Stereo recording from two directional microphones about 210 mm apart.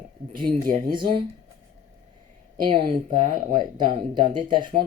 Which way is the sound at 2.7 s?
25° right (ahead or behind).